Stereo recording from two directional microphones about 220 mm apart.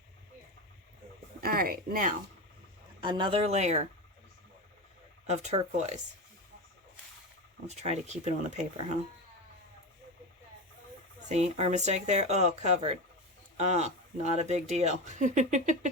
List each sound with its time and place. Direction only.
1.4 s speech: 40° right (ahead or behind)
3.0 s speech: 20° right (ahead or behind)
5.2 s speech: 30° right (ahead or behind)
7.7 s speech: 30° right (ahead or behind)
11.3 s speech: 30° right (ahead or behind)